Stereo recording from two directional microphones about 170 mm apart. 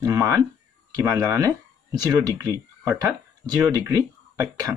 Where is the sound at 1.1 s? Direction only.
20° right (ahead or behind).